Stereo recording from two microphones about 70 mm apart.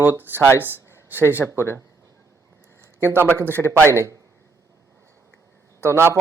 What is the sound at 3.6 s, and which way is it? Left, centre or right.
Speech, left.